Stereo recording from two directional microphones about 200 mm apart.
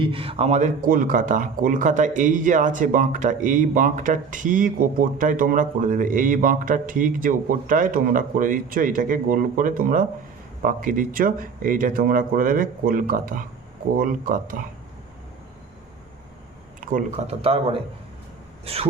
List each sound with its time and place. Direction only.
0.0 s a man's voice: 25° right (ahead or behind); by 14.6 s 45° right (ahead or behind)
16.8 s speech: 35° right (ahead or behind)